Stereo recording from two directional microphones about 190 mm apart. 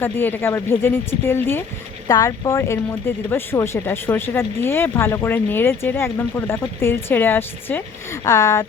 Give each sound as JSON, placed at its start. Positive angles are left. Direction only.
{"t": 0.0, "sound": "speech", "side_deg": 10}